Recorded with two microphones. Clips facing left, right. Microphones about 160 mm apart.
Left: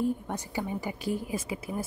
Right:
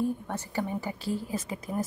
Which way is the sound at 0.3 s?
15° left (ahead or behind).